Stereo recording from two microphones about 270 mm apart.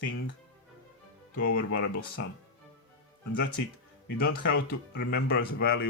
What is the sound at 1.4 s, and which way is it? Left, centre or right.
Speech, left.